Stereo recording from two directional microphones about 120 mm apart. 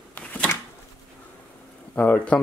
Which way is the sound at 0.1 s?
10° left (ahead or behind).